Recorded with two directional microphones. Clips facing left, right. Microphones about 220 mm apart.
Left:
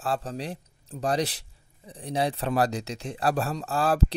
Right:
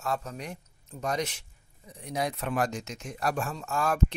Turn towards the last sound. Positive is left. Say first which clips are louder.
# left 3 dB
turn(degrees=35)  # may be behind; listen again after turning